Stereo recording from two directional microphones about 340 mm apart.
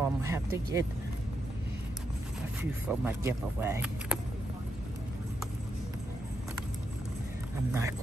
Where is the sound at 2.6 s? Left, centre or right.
Centre.